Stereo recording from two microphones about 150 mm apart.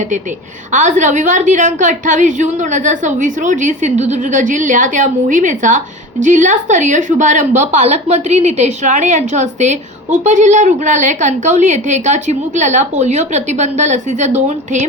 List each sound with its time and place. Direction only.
0.7 s a woman's voice: 55° right (ahead or behind)